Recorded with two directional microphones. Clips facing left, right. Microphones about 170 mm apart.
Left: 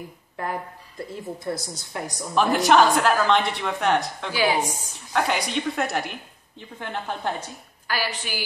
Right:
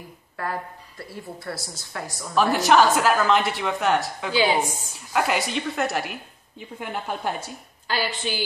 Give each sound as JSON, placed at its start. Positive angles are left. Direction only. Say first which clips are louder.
{"t": 0.4, "sound": "a woman's voice", "louder": "even", "side_deg": 20}
{"t": 2.3, "sound": "a woman's voice", "louder": "even", "side_deg": 0}
{"t": 4.3, "sound": "a woman's voice", "louder": "right 2 dB", "side_deg": -25}
{"t": 5.1, "sound": "a woman's voice", "louder": "even", "side_deg": -5}
{"t": 7.8, "sound": "a woman's voice", "louder": "right 2 dB", "side_deg": -25}